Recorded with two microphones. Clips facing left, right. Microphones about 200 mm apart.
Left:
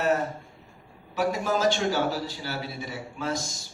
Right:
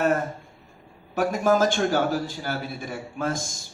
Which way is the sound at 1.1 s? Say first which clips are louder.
Right 5 dB; 50° right (ahead or behind).